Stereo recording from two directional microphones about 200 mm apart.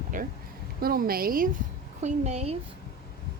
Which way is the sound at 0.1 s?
40° right (ahead or behind).